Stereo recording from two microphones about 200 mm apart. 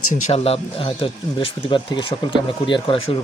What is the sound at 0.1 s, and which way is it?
Speech, 30° left (ahead or behind).